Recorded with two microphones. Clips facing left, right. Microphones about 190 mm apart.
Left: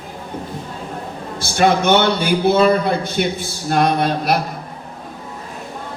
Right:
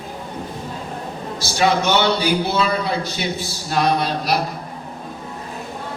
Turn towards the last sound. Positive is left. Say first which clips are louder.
# left 2 dB
turn(degrees=55)  # may be behind; listen again after turning